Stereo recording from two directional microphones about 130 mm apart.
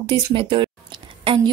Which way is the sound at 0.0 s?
40° right (ahead or behind).